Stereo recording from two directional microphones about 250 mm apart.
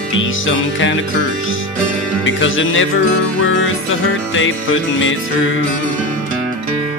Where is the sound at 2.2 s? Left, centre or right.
Left.